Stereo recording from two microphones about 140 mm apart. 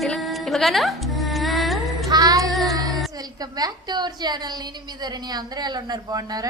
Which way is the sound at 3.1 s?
30° right (ahead or behind).